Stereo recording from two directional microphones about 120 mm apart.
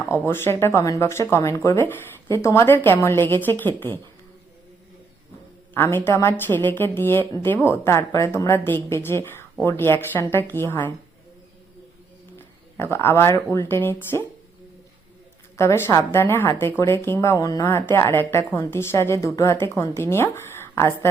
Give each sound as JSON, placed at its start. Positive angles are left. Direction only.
{"t": 0.0, "sound": "a woman's voice", "side_deg": 20}
{"t": 5.7, "sound": "a woman's voice", "side_deg": 20}
{"t": 12.7, "sound": "a woman's voice", "side_deg": 20}
{"t": 15.5, "sound": "a woman's voice", "side_deg": 20}